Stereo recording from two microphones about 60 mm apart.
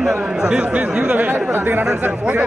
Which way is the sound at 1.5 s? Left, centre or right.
Right.